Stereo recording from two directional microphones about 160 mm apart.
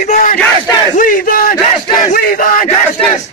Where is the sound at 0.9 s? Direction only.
60° left (ahead or behind).